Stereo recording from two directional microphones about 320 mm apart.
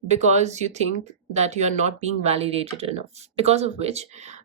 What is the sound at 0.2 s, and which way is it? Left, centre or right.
Speech, right.